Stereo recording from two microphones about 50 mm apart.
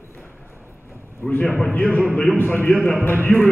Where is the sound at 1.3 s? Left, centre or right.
Left.